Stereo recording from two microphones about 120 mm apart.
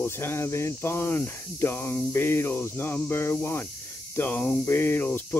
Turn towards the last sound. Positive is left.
turn(degrees=15)  # may be behind; listen again after turning